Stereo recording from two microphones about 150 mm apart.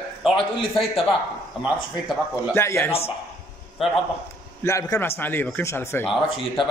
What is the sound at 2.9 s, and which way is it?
Speech, 40° left (ahead or behind).